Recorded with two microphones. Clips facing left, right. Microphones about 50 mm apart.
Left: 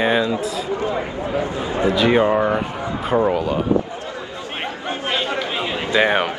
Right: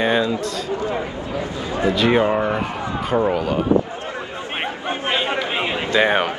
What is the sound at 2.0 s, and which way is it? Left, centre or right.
Speech, centre.